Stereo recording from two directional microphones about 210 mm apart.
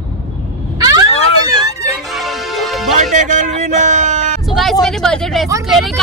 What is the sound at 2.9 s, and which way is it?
Speech, 35° right (ahead or behind).